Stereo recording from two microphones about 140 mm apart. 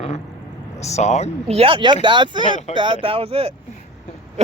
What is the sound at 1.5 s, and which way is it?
A man's voice, 40° right (ahead or behind).